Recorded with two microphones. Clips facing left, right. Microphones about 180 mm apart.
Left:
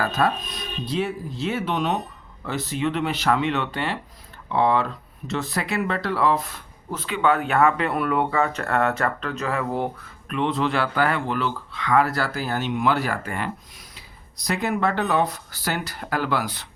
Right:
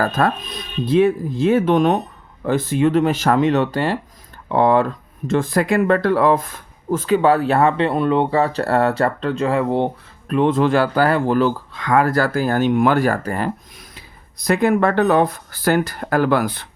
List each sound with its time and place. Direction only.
0.0 s speech: 50° right (ahead or behind); by 10.3 s 25° right (ahead or behind)
10.3 s speech: 45° right (ahead or behind)
14.4 s speech: 55° right (ahead or behind)